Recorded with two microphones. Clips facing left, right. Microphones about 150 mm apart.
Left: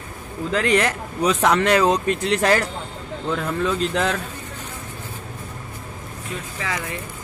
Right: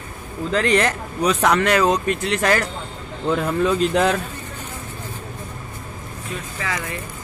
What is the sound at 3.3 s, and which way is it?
Speech, 15° right (ahead or behind).